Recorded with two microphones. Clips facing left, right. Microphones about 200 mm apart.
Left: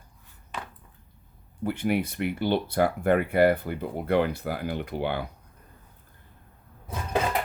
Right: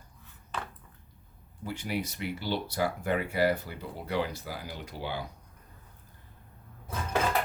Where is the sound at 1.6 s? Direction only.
55° left (ahead or behind).